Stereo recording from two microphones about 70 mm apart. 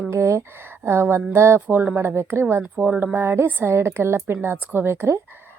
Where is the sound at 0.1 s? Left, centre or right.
Right.